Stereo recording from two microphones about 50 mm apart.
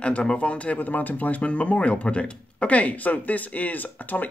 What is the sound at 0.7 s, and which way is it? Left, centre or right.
Speech, left.